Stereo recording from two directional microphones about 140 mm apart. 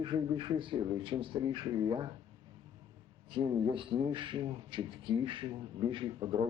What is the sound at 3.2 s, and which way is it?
A man's voice, 35° right (ahead or behind).